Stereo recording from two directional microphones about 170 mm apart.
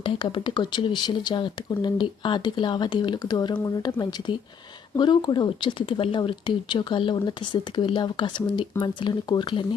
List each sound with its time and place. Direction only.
0.0 s speech: 30° left (ahead or behind)